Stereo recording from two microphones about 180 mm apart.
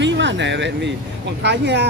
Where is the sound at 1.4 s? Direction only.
75° right (ahead or behind).